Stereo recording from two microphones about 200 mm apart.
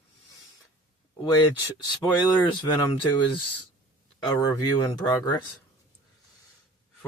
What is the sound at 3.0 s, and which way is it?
Speech, 25° left (ahead or behind).